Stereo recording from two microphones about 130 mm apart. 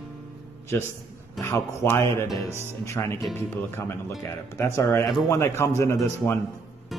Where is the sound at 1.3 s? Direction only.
20° left (ahead or behind).